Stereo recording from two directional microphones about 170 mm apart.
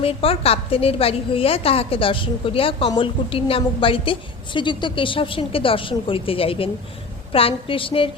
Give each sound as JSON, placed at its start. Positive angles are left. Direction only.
{"t": 0.0, "sound": "a woman's voice", "side_deg": 35}